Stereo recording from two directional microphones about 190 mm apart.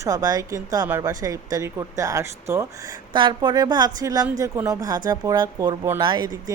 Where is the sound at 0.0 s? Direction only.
20° right (ahead or behind).